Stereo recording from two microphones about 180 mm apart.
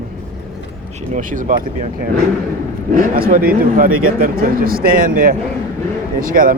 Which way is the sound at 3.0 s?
50° right (ahead or behind).